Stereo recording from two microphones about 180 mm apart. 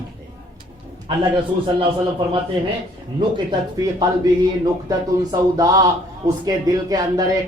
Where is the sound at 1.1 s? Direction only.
25° right (ahead or behind).